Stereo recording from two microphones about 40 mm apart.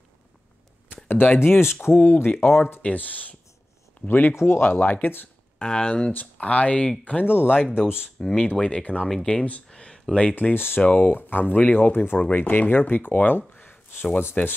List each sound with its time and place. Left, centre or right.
1.0 s a sound: left
1.4 s speech: left
2.8 s speech: left
4.1 s speech: left
5.6 s speech: left
7.2 s speech: left
7.6 s speech: centre
8.2 s speech: centre
8.5 s speech: left
10.5 s speech: left
10.8 s speech: left
11.1 s speech: left
13.6 s a sound: left
14.4 s speech: left